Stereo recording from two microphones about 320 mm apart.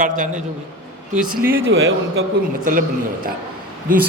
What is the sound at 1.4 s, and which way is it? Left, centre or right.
Speech, centre.